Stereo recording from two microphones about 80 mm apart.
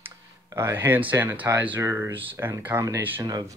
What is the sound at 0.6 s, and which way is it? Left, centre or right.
Speech, right.